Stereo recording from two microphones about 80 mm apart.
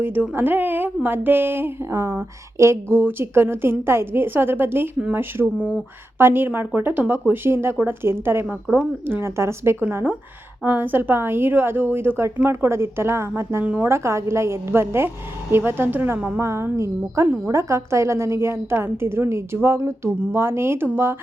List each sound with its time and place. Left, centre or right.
0.0 s a woman's voice: right
10.6 s a woman's voice: right
16.4 s a woman's voice: right
17.2 s a woman's voice: right
17.5 s a woman's voice: right